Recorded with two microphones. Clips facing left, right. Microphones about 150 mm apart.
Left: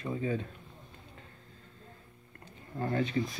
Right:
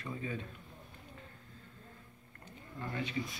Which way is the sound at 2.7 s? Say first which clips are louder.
Left 8 dB; 40° left (ahead or behind).